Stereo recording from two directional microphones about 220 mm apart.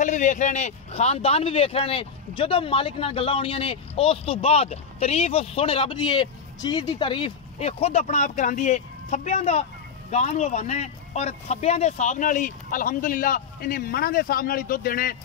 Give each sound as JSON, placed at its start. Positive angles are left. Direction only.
{"t": 0.0, "sound": "speech", "side_deg": 35}